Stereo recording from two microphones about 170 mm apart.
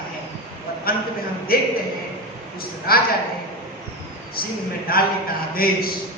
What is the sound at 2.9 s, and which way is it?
Speech, 65° left (ahead or behind).